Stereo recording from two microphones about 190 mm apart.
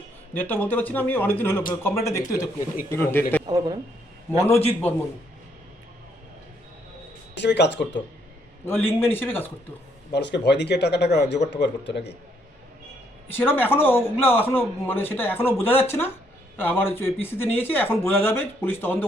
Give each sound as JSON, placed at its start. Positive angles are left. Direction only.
{"t": 0.3, "sound": "a man's voice", "side_deg": 10}
{"t": 3.4, "sound": "speech", "side_deg": -20}
{"t": 7.3, "sound": "speech", "side_deg": 65}
{"t": 8.6, "sound": "a man's voice", "side_deg": 10}
{"t": 10.1, "sound": "speech", "side_deg": 65}
{"t": 13.2, "sound": "a man's voice", "side_deg": 10}